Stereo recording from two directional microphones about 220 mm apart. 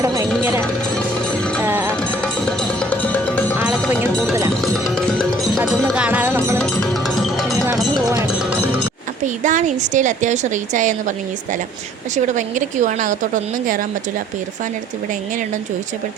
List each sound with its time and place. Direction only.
0.0 s vehicle: 15° right (ahead or behind)
1.6 s music: 10° right (ahead or behind)
2.9 s music: 5° left (ahead or behind)
3.6 s music: 5° right (ahead or behind)
6.6 s music: centre (ahead or behind)
8.0 s music: 15° right (ahead or behind)
8.3 s music: 5° right (ahead or behind)
9.2 s speech: 35° right (ahead or behind)
12.1 s speech: 35° right (ahead or behind)